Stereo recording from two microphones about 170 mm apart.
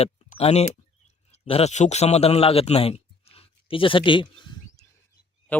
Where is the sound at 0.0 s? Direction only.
35° left (ahead or behind).